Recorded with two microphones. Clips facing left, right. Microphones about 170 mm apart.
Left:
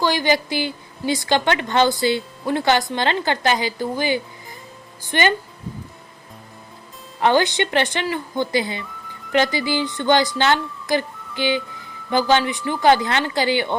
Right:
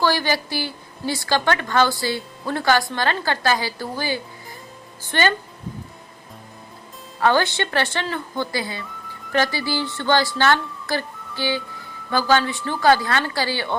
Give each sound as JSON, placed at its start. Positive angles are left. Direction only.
{"t": 0.0, "sound": "a woman's voice", "side_deg": 15}
{"t": 7.2, "sound": "a woman's voice", "side_deg": 20}